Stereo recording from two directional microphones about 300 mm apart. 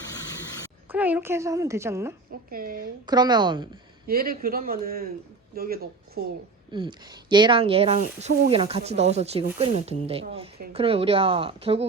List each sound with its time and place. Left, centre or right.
0.9 s speech: centre
2.5 s speech: right
3.1 s speech: centre
4.0 s speech: right
6.7 s speech: centre